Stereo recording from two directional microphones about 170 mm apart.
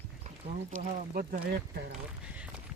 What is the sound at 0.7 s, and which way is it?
Speech, 55° right (ahead or behind).